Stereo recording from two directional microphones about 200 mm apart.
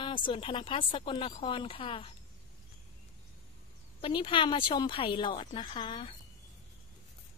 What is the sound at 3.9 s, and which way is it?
A woman's voice, 25° left (ahead or behind).